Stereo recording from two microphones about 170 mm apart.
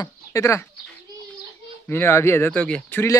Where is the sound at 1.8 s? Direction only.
15° left (ahead or behind).